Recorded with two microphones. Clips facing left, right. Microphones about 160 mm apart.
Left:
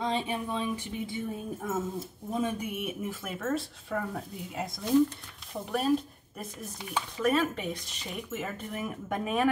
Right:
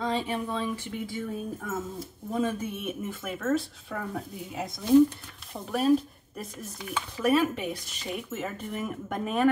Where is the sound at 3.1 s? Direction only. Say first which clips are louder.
Right 7 dB; centre (ahead or behind).